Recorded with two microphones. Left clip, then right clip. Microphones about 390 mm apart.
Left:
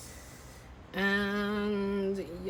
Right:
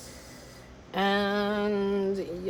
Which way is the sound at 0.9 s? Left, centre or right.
Centre.